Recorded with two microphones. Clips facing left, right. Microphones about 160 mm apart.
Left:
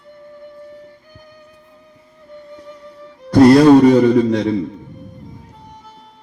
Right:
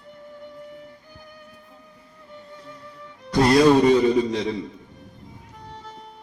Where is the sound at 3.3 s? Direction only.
60° left (ahead or behind).